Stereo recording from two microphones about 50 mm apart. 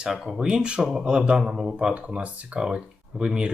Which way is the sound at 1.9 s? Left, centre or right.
Right.